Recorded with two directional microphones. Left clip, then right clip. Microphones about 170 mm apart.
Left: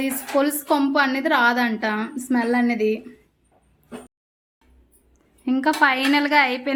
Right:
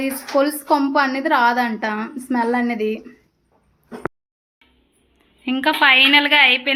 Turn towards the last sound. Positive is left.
turn(degrees=30)  # may be behind; listen again after turning